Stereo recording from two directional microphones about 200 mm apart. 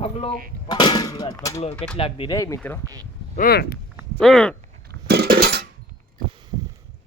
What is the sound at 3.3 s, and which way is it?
Speech, 50° left (ahead or behind).